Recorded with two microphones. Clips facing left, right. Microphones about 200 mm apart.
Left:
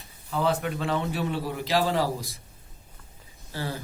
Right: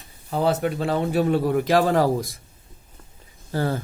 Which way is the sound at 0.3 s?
40° right (ahead or behind).